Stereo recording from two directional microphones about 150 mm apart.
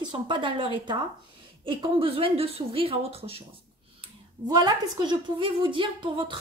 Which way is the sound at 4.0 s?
30° right (ahead or behind).